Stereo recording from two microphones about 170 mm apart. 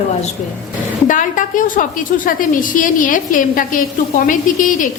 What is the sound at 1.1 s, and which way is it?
A woman's voice, 50° left (ahead or behind).